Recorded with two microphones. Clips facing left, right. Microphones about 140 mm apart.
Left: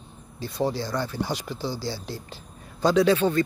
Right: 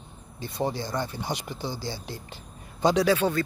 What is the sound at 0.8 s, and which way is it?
Speech, 20° right (ahead or behind).